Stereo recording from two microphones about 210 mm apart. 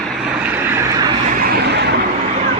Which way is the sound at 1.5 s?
50° right (ahead or behind).